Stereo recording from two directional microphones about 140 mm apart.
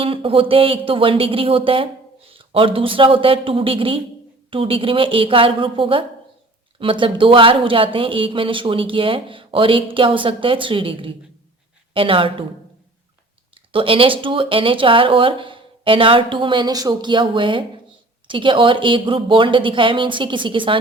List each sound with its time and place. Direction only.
0.0 s speech: 40° right (ahead or behind)
13.7 s speech: 40° right (ahead or behind)